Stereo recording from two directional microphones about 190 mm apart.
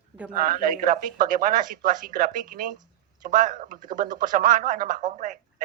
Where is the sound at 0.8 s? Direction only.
45° right (ahead or behind).